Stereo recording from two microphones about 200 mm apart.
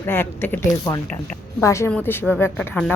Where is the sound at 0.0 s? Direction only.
10° left (ahead or behind).